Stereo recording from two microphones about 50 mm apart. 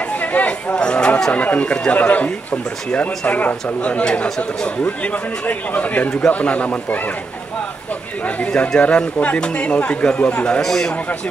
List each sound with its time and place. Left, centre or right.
0.1 s speech: left
0.7 s speech: centre
8.5 s speech: left
10.6 s speech: centre